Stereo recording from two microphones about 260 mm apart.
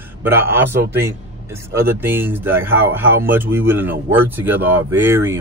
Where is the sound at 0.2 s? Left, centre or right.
Centre.